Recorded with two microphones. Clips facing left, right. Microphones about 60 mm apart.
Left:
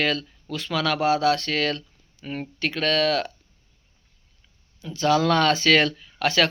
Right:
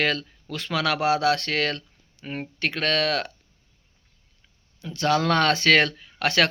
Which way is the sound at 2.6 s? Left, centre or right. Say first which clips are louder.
Left 2 dB; right.